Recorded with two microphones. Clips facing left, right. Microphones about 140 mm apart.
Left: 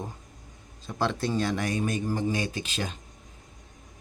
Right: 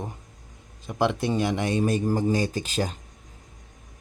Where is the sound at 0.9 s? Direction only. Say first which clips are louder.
Right 4 dB; 15° right (ahead or behind).